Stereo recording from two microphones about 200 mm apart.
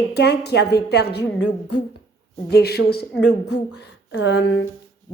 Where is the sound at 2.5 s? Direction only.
55° left (ahead or behind).